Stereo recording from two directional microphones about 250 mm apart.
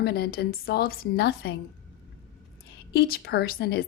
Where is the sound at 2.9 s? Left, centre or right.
Left.